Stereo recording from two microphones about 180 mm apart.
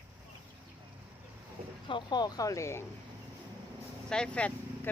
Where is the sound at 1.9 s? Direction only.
25° left (ahead or behind).